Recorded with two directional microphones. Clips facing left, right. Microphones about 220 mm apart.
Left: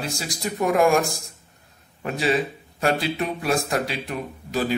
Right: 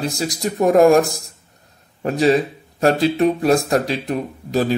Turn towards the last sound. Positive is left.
turn(degrees=-40)  # may be behind; listen again after turning